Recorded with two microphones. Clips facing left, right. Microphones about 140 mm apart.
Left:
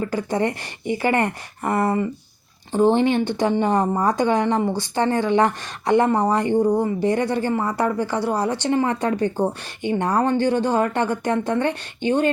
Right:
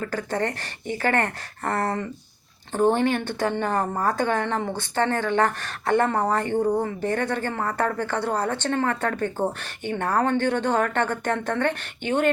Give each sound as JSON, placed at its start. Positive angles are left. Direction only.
{"t": 0.0, "sound": "a woman's voice", "side_deg": 15}